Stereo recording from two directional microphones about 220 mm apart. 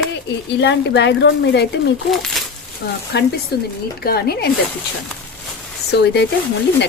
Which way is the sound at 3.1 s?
50° left (ahead or behind).